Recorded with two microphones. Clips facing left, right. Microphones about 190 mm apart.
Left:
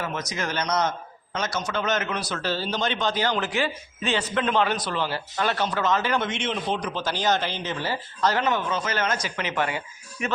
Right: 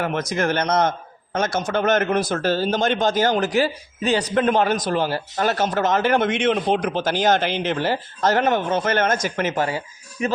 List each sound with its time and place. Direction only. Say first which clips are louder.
0.0 s a man's voice: right 7 dB; 55° right (ahead or behind); by 10.3 s 35° right (ahead or behind)